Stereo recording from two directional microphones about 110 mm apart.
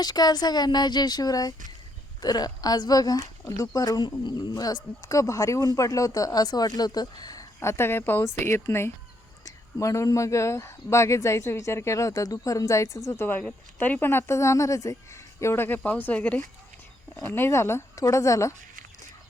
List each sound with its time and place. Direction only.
0.0 s speech: 40° left (ahead or behind)